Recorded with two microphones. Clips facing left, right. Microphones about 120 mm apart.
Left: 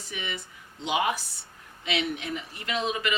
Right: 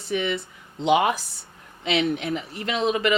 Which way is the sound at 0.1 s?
65° right (ahead or behind).